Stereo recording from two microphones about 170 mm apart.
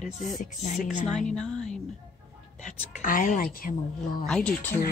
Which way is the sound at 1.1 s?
5° left (ahead or behind).